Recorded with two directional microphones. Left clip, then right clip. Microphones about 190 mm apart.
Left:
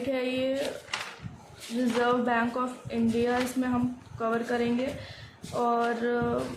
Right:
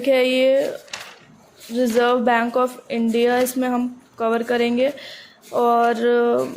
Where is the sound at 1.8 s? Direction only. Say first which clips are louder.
Right 9 dB; 45° right (ahead or behind).